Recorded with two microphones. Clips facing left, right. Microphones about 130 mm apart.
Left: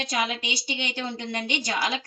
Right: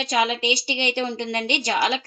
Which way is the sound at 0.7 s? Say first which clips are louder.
Right 6 dB; 75° right (ahead or behind).